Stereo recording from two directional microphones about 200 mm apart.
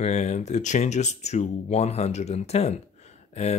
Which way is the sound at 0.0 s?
35° left (ahead or behind).